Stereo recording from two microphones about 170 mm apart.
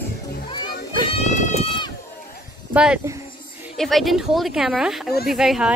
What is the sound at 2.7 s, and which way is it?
Speech, 5° right (ahead or behind).